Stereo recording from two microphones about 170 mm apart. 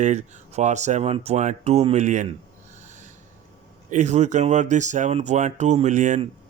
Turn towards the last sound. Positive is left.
turn(degrees=-45)  # may be behind; listen again after turning